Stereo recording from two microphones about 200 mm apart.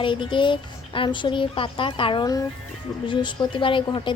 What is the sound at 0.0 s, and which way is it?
A woman's voice, 25° left (ahead or behind).